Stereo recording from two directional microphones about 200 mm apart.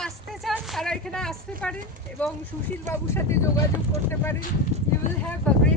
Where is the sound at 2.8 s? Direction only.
10° left (ahead or behind).